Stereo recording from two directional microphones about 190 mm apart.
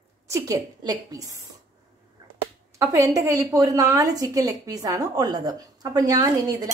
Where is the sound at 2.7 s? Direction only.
15° right (ahead or behind).